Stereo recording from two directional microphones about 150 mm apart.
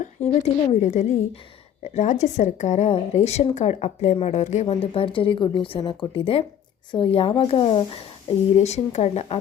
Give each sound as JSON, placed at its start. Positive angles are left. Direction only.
{"t": 0.7, "sound": "a woman's voice", "side_deg": 50}
{"t": 4.6, "sound": "speech", "side_deg": 35}